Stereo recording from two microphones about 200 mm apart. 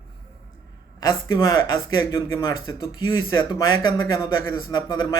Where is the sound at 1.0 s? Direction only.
15° left (ahead or behind).